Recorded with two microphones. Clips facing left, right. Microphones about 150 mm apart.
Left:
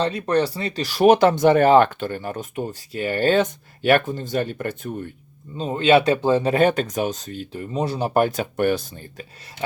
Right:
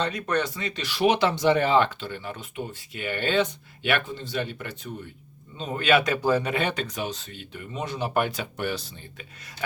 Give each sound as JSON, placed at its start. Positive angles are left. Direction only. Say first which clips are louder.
{"t": 0.0, "sound": "speech", "louder": "left 6 dB", "side_deg": 30}
{"t": 5.5, "sound": "speech", "louder": "left 6 dB", "side_deg": 30}
{"t": 6.5, "sound": "speech", "louder": "left 9 dB", "side_deg": 45}
{"t": 9.6, "sound": "a sound", "louder": "left 4 dB", "side_deg": 25}